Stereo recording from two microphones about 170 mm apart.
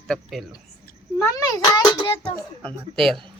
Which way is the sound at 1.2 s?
20° left (ahead or behind).